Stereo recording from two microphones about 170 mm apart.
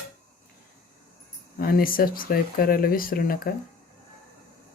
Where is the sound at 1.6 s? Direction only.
60° left (ahead or behind).